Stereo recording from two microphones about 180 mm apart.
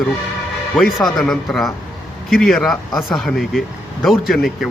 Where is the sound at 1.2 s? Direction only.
Centre (ahead or behind).